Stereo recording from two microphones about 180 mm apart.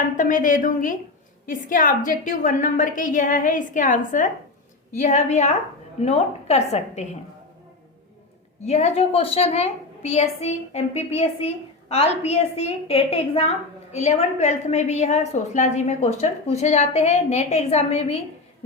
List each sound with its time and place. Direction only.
0.2 s a woman's voice: 45° left (ahead or behind)
8.6 s a woman's voice: 35° left (ahead or behind)